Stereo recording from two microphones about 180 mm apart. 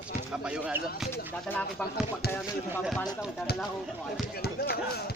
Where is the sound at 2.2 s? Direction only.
60° left (ahead or behind).